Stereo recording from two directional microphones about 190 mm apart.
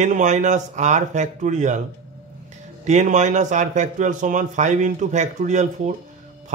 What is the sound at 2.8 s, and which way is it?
A man's voice, 40° right (ahead or behind).